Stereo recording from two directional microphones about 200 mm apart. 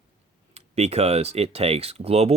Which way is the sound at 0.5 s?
30° right (ahead or behind).